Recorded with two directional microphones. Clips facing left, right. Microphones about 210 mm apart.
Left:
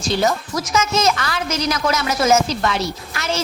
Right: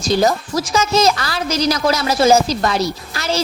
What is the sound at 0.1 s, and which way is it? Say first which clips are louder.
A woman's voice: right 4 dB; 35° right (ahead or behind).